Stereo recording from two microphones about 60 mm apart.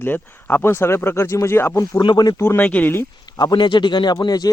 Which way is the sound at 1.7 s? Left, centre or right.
Left.